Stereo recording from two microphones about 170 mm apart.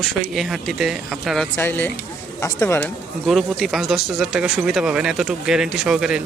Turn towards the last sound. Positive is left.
turn(degrees=-5)  # may be behind; listen again after turning